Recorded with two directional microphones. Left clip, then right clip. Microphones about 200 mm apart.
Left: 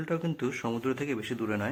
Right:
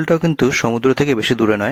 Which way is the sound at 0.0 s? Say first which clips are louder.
Right 16 dB; 45° right (ahead or behind).